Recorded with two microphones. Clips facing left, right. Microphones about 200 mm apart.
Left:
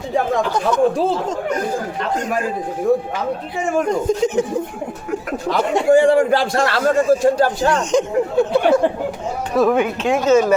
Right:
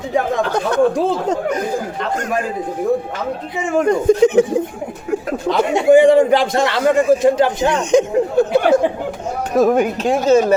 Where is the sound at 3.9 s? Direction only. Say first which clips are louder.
Right 5 dB; 60° right (ahead or behind).